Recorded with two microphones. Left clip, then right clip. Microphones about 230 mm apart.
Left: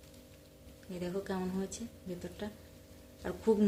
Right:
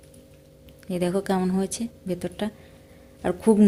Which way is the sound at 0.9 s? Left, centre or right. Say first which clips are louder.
Right 13 dB; right.